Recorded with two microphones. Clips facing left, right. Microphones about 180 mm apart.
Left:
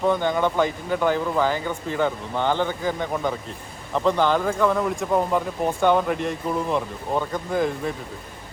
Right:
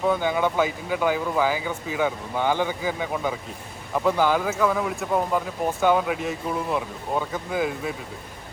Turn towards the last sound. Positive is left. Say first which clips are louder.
# left 2 dB
turn(degrees=-5)  # may be behind; listen again after turning